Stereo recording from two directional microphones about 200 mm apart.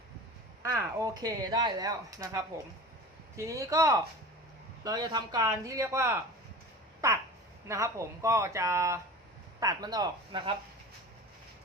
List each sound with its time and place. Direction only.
0.9 s speech: 15° right (ahead or behind)